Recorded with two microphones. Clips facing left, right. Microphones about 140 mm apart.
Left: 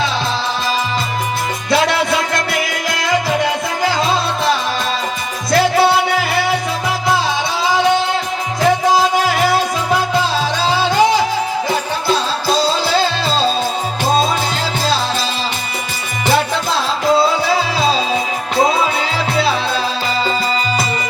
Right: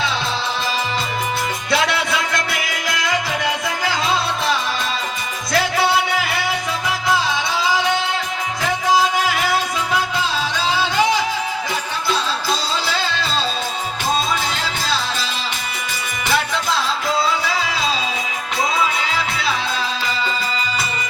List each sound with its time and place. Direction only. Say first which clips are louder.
1.7 s music: left 5 dB; 40° left (ahead or behind)
5.5 s music: left 6 dB; 35° left (ahead or behind)
8.6 s music: left 5 dB; 35° left (ahead or behind)
16.2 s music: left 5 dB; 30° left (ahead or behind)